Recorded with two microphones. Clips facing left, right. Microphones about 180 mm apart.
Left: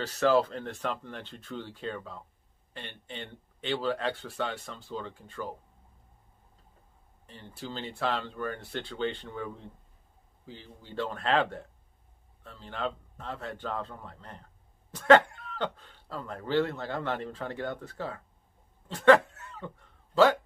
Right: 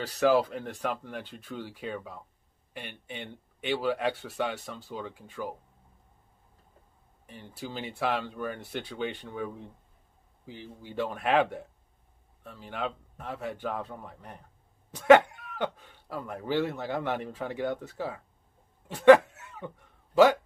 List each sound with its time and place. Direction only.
0.0 s speech: 15° right (ahead or behind)
7.2 s speech: 10° right (ahead or behind)
18.9 s a sound: 15° right (ahead or behind)